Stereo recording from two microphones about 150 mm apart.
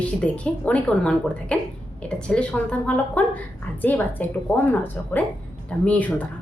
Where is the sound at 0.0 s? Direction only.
10° left (ahead or behind).